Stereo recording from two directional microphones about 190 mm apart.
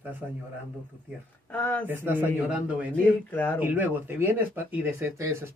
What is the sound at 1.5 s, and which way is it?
Speech, 10° left (ahead or behind).